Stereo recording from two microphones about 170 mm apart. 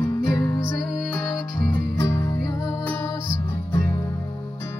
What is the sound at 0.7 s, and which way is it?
Music, centre (ahead or behind).